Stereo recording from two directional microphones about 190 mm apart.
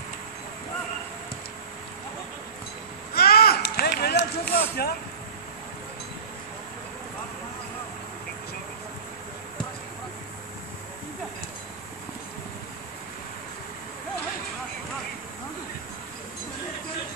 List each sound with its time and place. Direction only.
3.2 s run: 55° left (ahead or behind)